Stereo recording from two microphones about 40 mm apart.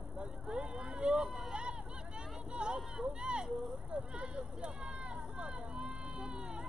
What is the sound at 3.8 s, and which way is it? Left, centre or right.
Vehicle, right.